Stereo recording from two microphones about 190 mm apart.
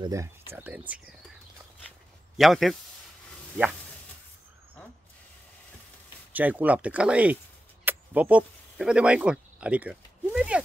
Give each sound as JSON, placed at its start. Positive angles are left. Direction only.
{"t": 0.0, "sound": "speech", "side_deg": -15}
{"t": 2.3, "sound": "speech", "side_deg": 0}
{"t": 6.3, "sound": "speech", "side_deg": -10}
{"t": 7.8, "sound": "a sound", "side_deg": -10}